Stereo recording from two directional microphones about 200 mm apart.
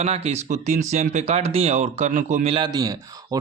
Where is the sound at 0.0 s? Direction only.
30° right (ahead or behind).